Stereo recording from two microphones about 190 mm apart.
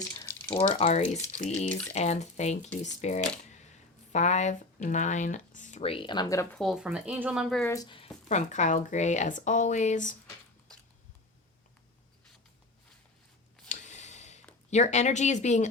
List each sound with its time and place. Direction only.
0.1 s a sound: 15° left (ahead or behind)
0.7 s speech: 35° left (ahead or behind)
1.6 s speech: 5° left (ahead or behind)
1.9 s speech: 35° left (ahead or behind); by 6.6 s 15° left (ahead or behind)
6.6 s speech: centre (ahead or behind)
7.6 s speech: 15° left (ahead or behind)
8.3 s speech: 40° left (ahead or behind)
13.7 s a sound: 40° left (ahead or behind)
14.7 s speech: 35° left (ahead or behind)